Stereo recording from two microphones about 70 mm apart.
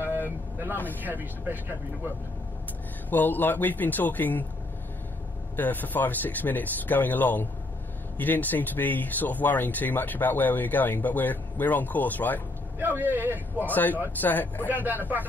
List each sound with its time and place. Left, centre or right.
1.0 s a man's voice: right
3.1 s speech: left
5.6 s speech: left
12.7 s a man's voice: right
13.7 s speech: left
14.7 s a man's voice: right